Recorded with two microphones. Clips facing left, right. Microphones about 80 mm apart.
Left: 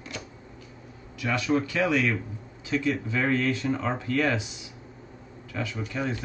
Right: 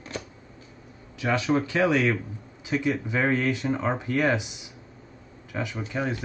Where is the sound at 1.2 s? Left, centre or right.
Right.